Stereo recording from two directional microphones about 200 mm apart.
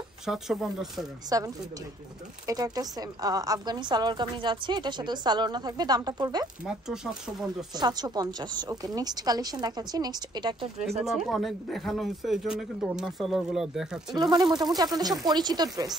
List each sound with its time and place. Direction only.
0.2 s speech: centre (ahead or behind)
1.3 s a woman's voice: 15° right (ahead or behind)
6.6 s speech: 5° right (ahead or behind)
7.7 s a woman's voice: 20° right (ahead or behind)
11.1 s speech: centre (ahead or behind)
14.1 s a woman's voice: 20° right (ahead or behind)